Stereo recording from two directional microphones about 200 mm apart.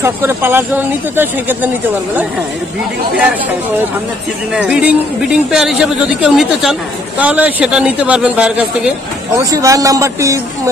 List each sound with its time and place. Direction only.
0.0 s a man's voice: 10° right (ahead or behind)
4.6 s speech: 5° right (ahead or behind)
9.4 s a man's voice: 15° right (ahead or behind)